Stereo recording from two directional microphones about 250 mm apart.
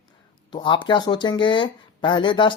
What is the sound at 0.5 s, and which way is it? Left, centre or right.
Speech, centre.